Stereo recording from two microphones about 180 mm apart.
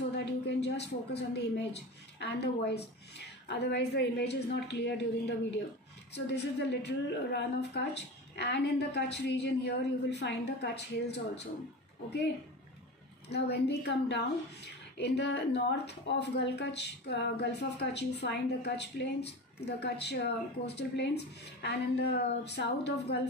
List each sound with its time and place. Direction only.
0.2 s a sound: 70° left (ahead or behind)
2.1 s a woman's voice: 70° left (ahead or behind)
6.1 s a woman's voice: 70° left (ahead or behind)
13.3 s a woman's voice: 70° left (ahead or behind)